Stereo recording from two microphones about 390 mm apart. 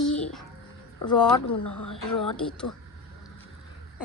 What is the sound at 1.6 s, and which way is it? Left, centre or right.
Speech, left.